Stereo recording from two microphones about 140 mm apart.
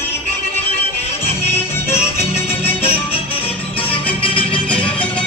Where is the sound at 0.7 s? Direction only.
45° left (ahead or behind).